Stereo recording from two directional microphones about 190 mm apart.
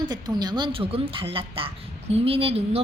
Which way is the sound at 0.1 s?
20° right (ahead or behind).